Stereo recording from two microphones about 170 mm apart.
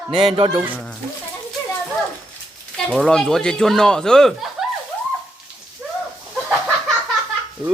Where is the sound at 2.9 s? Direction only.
5° left (ahead or behind).